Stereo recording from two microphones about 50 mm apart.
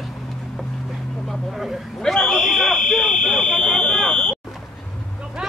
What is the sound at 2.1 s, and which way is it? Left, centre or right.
Fire alarm, centre.